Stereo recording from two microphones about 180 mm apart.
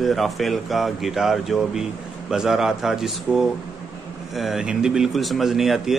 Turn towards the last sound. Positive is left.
turn(degrees=0)  # may be behind; listen again after turning